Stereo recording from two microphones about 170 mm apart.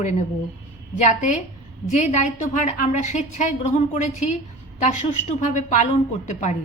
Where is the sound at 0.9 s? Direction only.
45° left (ahead or behind).